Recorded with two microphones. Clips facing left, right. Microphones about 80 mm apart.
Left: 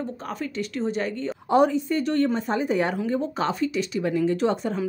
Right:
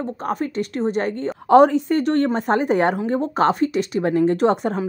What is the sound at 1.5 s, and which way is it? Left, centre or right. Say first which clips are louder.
Speech: right 7 dB; right.